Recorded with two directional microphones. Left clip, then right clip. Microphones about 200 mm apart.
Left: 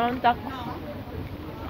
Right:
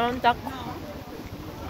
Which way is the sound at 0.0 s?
55° right (ahead or behind).